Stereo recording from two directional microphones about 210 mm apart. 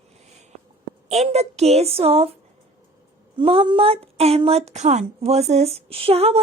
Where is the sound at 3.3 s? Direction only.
25° right (ahead or behind).